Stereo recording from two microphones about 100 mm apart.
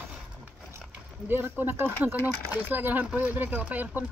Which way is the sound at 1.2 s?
20° right (ahead or behind).